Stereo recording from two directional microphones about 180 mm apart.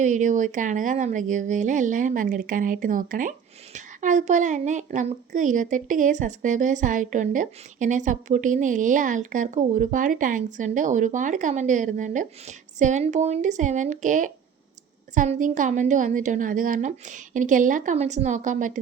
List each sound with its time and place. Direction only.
0.0 s a woman's voice: 45° right (ahead or behind)